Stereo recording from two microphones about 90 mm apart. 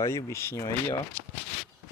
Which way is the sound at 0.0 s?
30° left (ahead or behind).